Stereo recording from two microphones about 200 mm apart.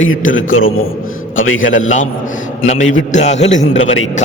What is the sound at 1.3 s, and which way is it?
Speech, 80° left.